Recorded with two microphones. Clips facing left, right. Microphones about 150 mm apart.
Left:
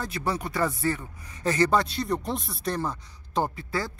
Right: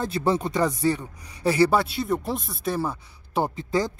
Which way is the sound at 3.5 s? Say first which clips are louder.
Right 6 dB; 20° right (ahead or behind).